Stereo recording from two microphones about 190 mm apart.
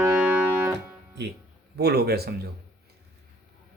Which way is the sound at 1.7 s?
55° right (ahead or behind).